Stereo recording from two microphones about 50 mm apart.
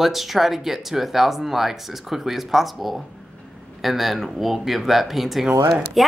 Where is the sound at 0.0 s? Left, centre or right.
Centre.